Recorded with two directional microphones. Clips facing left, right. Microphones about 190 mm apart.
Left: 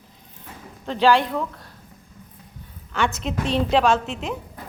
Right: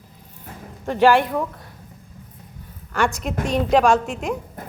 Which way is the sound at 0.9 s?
15° right (ahead or behind).